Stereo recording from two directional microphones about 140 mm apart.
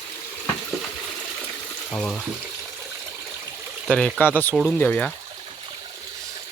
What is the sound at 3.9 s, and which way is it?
Speech, 5° left (ahead or behind).